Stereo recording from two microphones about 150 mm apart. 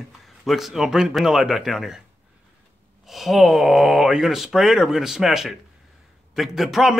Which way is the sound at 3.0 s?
Centre (ahead or behind).